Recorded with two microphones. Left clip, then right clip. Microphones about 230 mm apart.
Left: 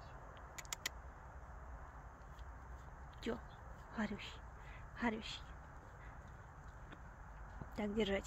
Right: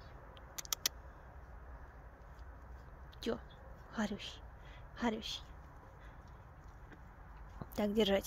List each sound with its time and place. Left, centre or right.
0.6 s a sound: centre
3.2 s a woman's voice: centre
7.7 s a woman's voice: centre